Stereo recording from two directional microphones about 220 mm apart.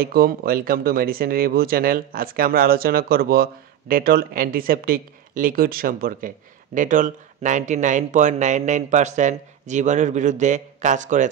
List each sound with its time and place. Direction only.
0.0 s speech: 40° right (ahead or behind)